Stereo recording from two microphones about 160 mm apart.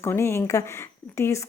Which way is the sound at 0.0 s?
15° left (ahead or behind).